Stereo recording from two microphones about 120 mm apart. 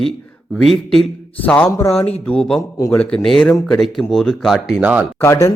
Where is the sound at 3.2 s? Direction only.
5° left (ahead or behind).